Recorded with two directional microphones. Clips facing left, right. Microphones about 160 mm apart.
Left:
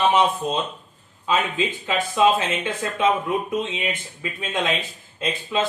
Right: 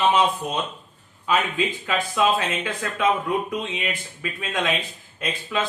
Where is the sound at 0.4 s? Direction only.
25° left (ahead or behind).